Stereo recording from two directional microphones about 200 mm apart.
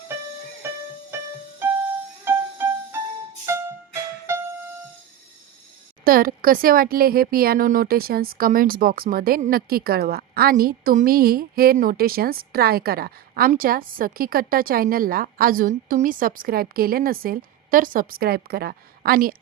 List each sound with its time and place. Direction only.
0.6 s music: 10° right (ahead or behind)
6.1 s a woman's voice: 45° right (ahead or behind)